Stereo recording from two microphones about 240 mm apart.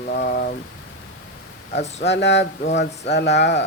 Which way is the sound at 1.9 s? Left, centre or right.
Left.